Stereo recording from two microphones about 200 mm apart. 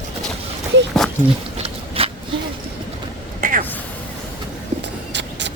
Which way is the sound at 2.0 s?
30° right (ahead or behind).